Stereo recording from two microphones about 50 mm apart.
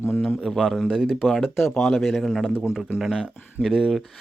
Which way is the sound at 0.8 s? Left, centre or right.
Centre.